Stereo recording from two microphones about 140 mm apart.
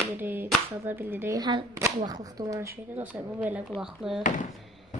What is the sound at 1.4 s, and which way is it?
Speech, 30° right (ahead or behind).